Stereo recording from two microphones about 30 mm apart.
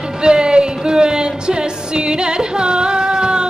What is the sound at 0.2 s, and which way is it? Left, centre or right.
Music, right.